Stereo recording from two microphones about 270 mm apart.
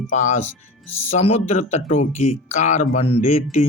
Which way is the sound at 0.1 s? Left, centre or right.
Left.